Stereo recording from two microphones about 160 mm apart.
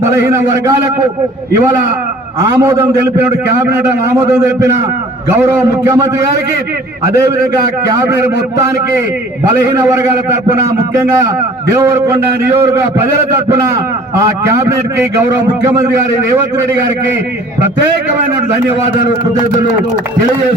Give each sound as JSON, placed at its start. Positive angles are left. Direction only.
{"t": 0.0, "sound": "a man's voice", "side_deg": -15}
{"t": 2.4, "sound": "a man's voice", "side_deg": -20}
{"t": 9.5, "sound": "a man's voice", "side_deg": -20}
{"t": 11.7, "sound": "a man's voice", "side_deg": -15}